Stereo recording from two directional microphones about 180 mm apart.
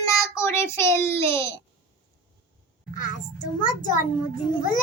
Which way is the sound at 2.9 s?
45° left (ahead or behind).